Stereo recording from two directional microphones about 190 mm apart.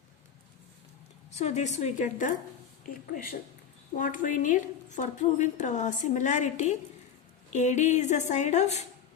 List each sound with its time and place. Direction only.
1.3 s a woman's voice: 35° left (ahead or behind)
3.9 s a woman's voice: 45° left (ahead or behind)